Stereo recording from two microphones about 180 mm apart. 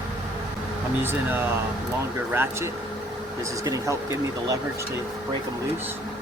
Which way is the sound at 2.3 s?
15° right (ahead or behind).